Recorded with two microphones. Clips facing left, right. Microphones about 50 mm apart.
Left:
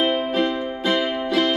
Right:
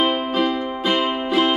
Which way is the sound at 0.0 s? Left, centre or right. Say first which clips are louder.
Right 1 dB; centre.